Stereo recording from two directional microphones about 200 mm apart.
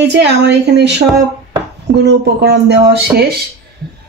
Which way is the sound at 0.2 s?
55° right (ahead or behind).